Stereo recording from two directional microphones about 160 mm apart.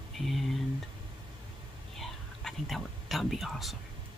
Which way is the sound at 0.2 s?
Centre (ahead or behind).